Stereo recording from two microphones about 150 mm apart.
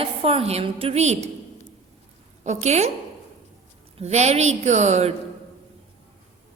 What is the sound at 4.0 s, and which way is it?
A woman's voice, 45° right (ahead or behind).